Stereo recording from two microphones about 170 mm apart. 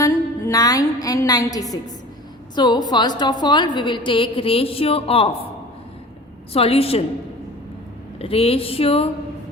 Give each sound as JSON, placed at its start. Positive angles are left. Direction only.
{"t": 0.0, "sound": "music", "side_deg": 20}
{"t": 2.6, "sound": "a woman's voice", "side_deg": 25}
{"t": 6.5, "sound": "speech", "side_deg": 35}
{"t": 8.2, "sound": "speech", "side_deg": 35}